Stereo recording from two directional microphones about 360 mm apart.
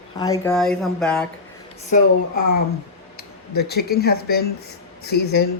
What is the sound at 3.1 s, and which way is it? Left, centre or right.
Speech, left.